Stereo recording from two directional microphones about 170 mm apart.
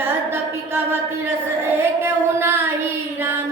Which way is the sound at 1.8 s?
15° right (ahead or behind).